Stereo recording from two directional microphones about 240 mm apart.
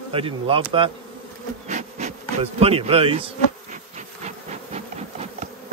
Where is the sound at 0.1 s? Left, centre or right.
Right.